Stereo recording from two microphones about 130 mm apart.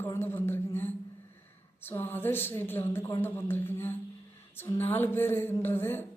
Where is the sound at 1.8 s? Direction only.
15° left (ahead or behind).